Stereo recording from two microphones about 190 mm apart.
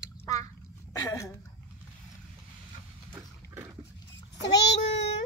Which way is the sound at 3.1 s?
15° right (ahead or behind).